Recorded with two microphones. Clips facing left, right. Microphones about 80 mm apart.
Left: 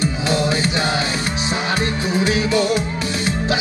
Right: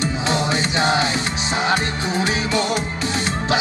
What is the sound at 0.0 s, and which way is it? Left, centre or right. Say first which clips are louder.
Music: left 2 dB; right.